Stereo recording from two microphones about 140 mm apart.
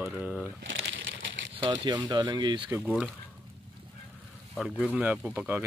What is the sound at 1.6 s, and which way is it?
Speech, 35° right (ahead or behind).